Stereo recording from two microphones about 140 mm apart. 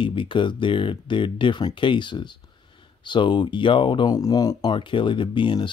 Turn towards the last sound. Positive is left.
turn(degrees=35)  # may be behind; listen again after turning